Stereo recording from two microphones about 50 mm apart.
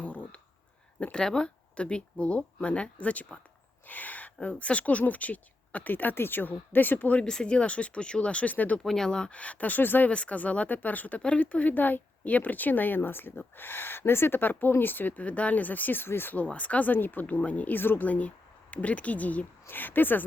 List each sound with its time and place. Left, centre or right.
0.0 s a sound: left
1.1 s speech: centre; by 7.2 s left
7.2 s speech: centre
8.8 s speech: centre
9.3 s speech: left
10.1 s speech: left
16.3 s speech: left
19.6 s speech: left